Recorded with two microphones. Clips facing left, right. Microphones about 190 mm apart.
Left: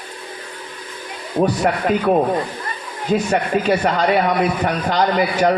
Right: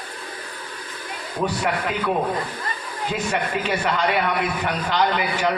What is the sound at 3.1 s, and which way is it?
Speech, 40° left (ahead or behind).